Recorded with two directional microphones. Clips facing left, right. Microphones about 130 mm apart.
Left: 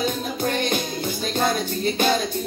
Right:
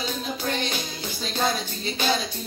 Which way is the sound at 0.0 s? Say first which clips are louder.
Left 5 dB; 50° left (ahead or behind).